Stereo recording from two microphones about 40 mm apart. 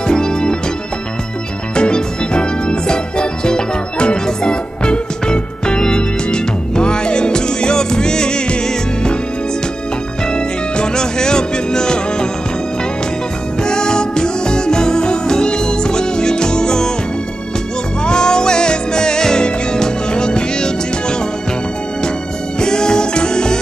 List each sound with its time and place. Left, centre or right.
0.0 s organ: centre
1.8 s music: left
10.3 s music: centre
13.7 s music: centre
18.0 s music: centre
22.6 s music: centre